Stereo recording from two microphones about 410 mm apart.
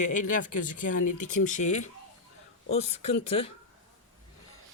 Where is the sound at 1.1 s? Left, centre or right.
Left.